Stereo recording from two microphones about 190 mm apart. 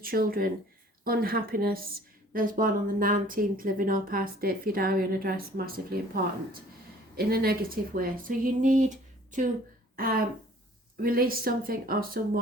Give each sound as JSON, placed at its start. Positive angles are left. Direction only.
{"t": 0.0, "sound": "speech", "side_deg": -50}
{"t": 7.2, "sound": "a woman's voice", "side_deg": -55}